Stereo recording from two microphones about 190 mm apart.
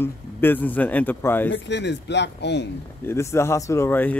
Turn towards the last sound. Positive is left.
turn(degrees=10)  # may be behind; listen again after turning